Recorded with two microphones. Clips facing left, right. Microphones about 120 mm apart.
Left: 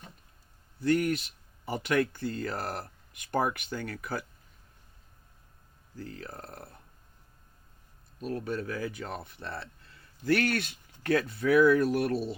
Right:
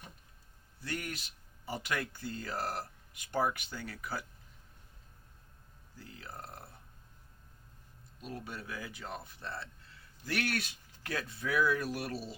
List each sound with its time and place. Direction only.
1.7 s speech: 55° left (ahead or behind)
6.0 s speech: 60° left (ahead or behind)
8.2 s speech: 55° left (ahead or behind)